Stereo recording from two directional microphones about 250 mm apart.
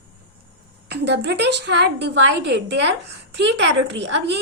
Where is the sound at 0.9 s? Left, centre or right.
Right.